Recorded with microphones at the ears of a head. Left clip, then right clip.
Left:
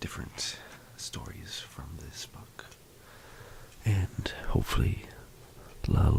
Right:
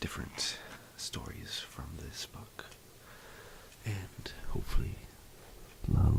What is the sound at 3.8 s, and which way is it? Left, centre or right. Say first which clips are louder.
Speech: left 8 dB; left.